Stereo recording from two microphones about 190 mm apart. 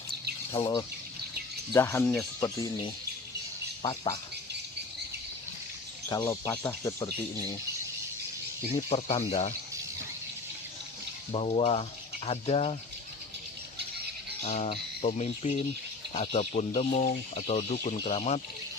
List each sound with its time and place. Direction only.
0.5 s speech: 30° left (ahead or behind)
1.7 s speech: 15° left (ahead or behind)
6.1 s speech: 20° left (ahead or behind)
8.9 s speech: 30° left (ahead or behind)
11.3 s speech: 30° left (ahead or behind)
14.4 s speech: 35° left (ahead or behind)